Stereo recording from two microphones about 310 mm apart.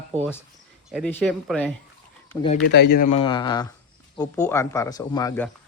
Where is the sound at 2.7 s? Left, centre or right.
Left.